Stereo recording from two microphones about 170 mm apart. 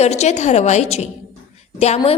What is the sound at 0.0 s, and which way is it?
A woman's voice, 40° left (ahead or behind).